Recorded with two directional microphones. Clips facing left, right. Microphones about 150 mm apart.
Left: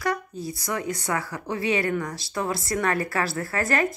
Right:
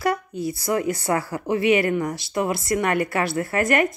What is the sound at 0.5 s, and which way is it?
A woman's voice, 25° right (ahead or behind).